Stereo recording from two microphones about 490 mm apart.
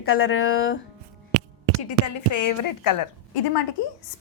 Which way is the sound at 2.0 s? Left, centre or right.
Left.